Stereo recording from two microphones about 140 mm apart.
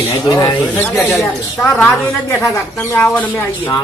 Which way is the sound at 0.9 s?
15° left (ahead or behind).